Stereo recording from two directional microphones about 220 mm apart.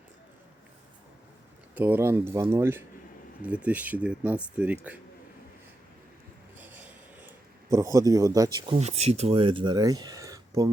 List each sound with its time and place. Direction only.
1.7 s speech: 10° right (ahead or behind)
6.6 s a sound: 10° right (ahead or behind)
7.7 s speech: 15° right (ahead or behind)
8.7 s speech: 30° right (ahead or behind)